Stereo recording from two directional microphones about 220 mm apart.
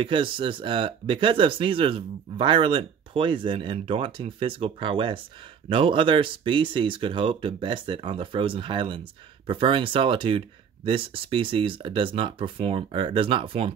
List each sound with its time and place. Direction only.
0.0 s speech: 25° right (ahead or behind)